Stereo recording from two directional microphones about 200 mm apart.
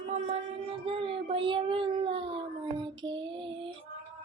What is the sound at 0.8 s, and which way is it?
Child singing, 25° right (ahead or behind).